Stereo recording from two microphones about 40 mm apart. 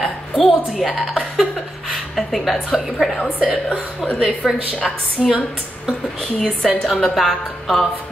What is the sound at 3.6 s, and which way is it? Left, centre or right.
Speech, left.